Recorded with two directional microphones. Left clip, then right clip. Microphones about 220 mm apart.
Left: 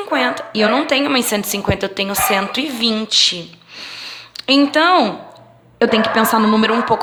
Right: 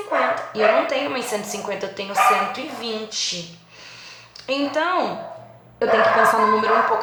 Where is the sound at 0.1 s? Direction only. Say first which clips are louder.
Left 2 dB; 40° left (ahead or behind).